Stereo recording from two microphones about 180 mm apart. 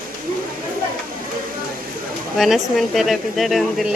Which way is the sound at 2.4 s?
Centre (ahead or behind).